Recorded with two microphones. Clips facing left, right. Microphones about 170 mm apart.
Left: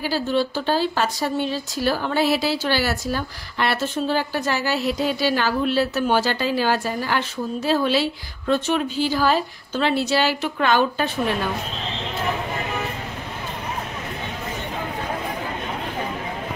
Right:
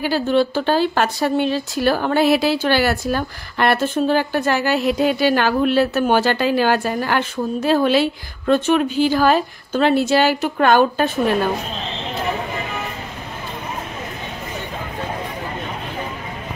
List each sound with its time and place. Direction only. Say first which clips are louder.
0.0 s speech: right 5 dB; 60° right (ahead or behind)